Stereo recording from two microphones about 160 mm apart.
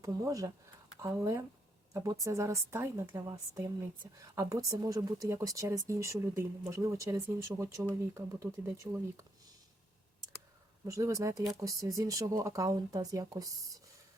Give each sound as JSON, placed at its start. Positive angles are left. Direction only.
{"t": 0.0, "sound": "a woman's voice", "side_deg": -20}
{"t": 10.8, "sound": "a woman's voice", "side_deg": -20}